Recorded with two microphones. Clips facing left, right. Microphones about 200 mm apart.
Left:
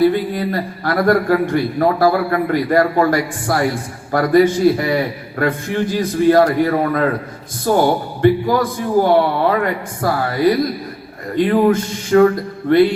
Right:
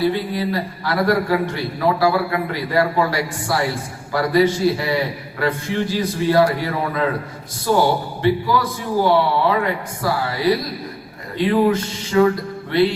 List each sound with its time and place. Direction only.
0.1 s a man's voice: 50° left (ahead or behind)